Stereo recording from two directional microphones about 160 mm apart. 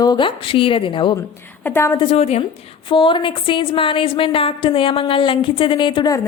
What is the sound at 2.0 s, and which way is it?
A woman's voice, 40° left (ahead or behind).